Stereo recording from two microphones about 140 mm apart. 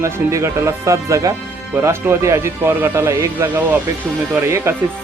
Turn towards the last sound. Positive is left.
turn(degrees=-20)  # may be behind; listen again after turning